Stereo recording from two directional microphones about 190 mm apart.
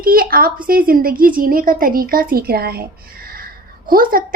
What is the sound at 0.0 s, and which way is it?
Speech, 50° right (ahead or behind).